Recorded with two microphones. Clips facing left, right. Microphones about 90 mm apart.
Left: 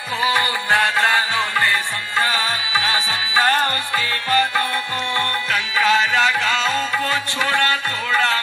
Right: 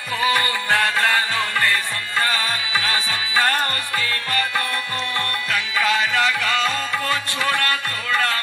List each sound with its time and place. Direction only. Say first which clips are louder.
0.2 s music: left 1 dB; 20° left (ahead or behind)